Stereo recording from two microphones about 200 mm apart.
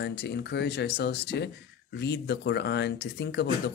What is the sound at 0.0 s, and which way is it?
Speech, 55° left (ahead or behind).